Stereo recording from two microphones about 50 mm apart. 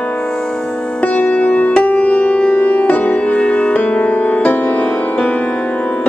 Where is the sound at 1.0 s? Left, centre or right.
Left.